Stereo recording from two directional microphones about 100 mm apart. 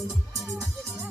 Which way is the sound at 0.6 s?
20° right (ahead or behind).